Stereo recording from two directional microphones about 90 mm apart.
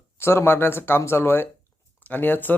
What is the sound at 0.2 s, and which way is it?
Speech, 30° left (ahead or behind).